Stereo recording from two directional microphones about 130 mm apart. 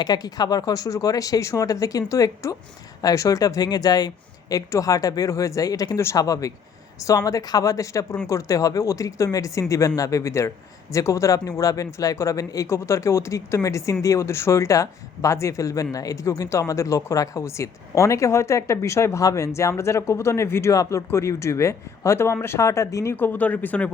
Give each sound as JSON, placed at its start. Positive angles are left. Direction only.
{"t": 0.0, "sound": "speech", "side_deg": 30}